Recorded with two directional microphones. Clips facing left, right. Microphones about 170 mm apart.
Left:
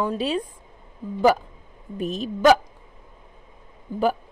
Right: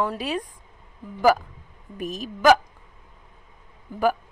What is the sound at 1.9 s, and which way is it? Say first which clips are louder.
Speech: left 4 dB; 30° left (ahead or behind).